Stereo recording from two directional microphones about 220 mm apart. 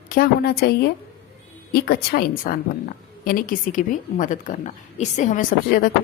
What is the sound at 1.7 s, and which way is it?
A woman's voice, 45° left (ahead or behind).